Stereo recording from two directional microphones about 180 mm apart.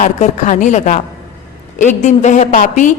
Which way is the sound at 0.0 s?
45° left (ahead or behind).